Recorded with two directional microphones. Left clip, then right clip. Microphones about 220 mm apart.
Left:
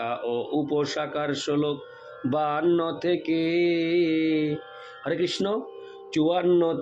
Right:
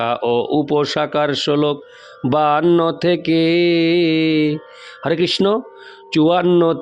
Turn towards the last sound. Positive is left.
turn(degrees=-50)  # may be behind; listen again after turning